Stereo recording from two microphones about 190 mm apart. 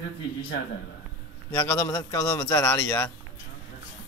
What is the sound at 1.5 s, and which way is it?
A man's voice, 15° left (ahead or behind).